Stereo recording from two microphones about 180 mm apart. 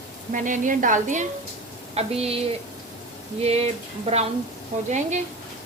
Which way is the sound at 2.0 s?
35° right (ahead or behind).